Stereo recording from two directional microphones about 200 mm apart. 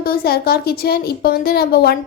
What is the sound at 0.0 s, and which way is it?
A woman's voice, 50° left (ahead or behind).